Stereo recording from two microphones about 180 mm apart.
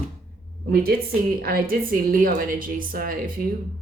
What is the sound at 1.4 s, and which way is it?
A woman's voice, 55° right (ahead or behind).